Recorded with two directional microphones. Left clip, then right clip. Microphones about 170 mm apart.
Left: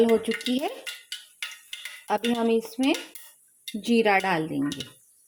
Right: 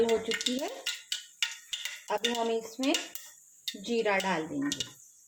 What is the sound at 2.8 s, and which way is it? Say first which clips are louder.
Speech: left 4 dB; 65° left (ahead or behind).